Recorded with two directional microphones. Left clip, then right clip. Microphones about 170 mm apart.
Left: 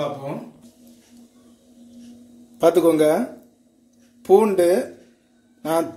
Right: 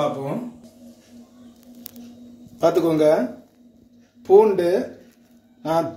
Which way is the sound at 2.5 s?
60° left (ahead or behind).